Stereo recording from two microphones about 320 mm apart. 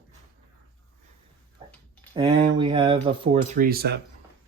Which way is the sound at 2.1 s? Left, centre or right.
Centre.